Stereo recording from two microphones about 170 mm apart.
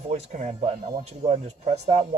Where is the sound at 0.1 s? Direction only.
45° right (ahead or behind).